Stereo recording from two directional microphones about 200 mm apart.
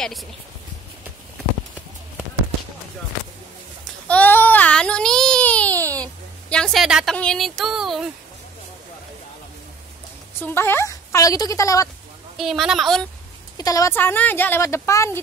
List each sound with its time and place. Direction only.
0.0 s speech: centre (ahead or behind)
4.1 s a sound: 10° left (ahead or behind)
6.5 s speech: centre (ahead or behind)
10.4 s speech: 10° left (ahead or behind)
12.4 s speech: centre (ahead or behind)
13.6 s speech: 15° left (ahead or behind)